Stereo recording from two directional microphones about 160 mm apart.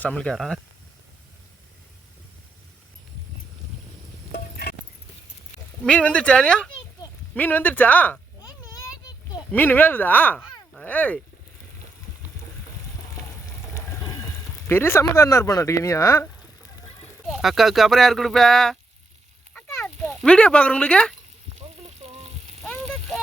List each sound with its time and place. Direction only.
0.0 s speech: 10° left (ahead or behind)
4.3 s a sound: 70° left (ahead or behind)
5.8 s speech: 5° left (ahead or behind)
9.5 s speech: 10° left (ahead or behind)
13.7 s a sound: 20° left (ahead or behind)
14.7 s speech: 15° left (ahead or behind)
17.2 s speech: centre (ahead or behind)
19.8 s speech: 5° left (ahead or behind)
21.8 s frying: 45° right (ahead or behind)
22.6 s a sound: centre (ahead or behind)